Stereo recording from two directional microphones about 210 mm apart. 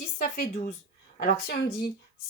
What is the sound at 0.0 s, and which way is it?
Speech, 45° left (ahead or behind).